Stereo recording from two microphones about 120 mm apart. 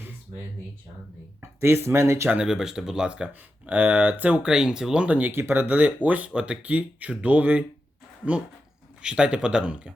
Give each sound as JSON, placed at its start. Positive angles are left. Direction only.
{"t": 1.4, "sound": "speech", "side_deg": -20}
{"t": 2.3, "sound": "speech", "side_deg": -5}
{"t": 9.0, "sound": "speech", "side_deg": -10}